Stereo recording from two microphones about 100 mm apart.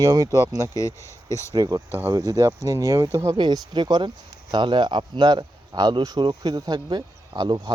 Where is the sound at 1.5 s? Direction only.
40° right (ahead or behind).